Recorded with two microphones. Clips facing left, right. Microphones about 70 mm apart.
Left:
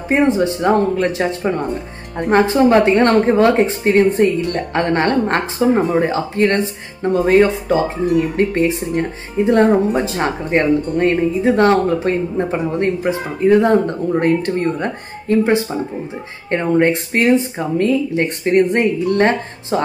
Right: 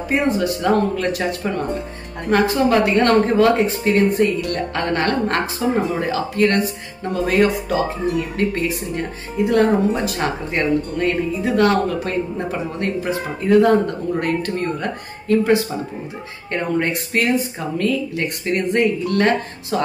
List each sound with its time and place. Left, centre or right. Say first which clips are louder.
0.1 s a woman's voice: left 5 dB; left